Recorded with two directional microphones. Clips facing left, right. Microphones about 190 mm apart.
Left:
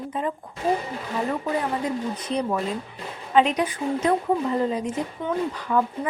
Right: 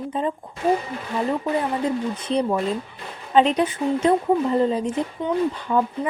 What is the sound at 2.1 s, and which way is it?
Speech, 30° right (ahead or behind).